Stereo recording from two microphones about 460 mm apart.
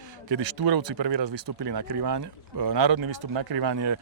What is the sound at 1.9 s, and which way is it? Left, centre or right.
Speech, right.